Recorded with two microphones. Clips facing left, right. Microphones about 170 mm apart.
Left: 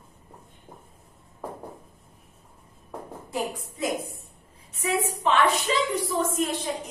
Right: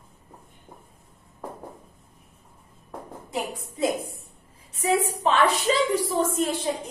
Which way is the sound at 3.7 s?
30° right (ahead or behind).